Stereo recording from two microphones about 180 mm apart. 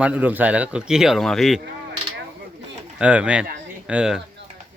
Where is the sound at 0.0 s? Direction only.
10° right (ahead or behind).